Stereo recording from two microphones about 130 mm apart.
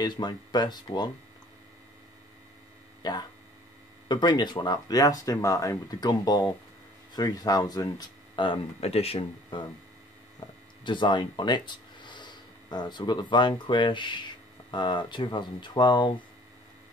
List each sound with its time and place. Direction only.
0.0 s speech: 35° left (ahead or behind)
3.0 s speech: 30° left (ahead or behind)
10.4 s a sound: 30° left (ahead or behind)
10.8 s speech: 35° left (ahead or behind)